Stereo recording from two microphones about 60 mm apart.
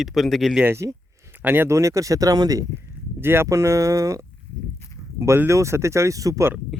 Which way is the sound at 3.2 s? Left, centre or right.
Right.